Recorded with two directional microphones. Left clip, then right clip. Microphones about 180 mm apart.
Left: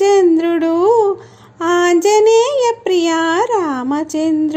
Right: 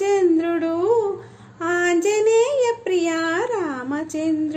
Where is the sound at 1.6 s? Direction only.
40° left (ahead or behind).